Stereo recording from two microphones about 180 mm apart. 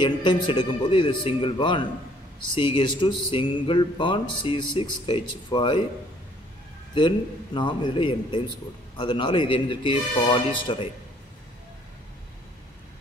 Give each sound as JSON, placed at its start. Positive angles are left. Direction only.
{"t": 0.0, "sound": "speech", "side_deg": 25}
{"t": 6.9, "sound": "speech", "side_deg": 25}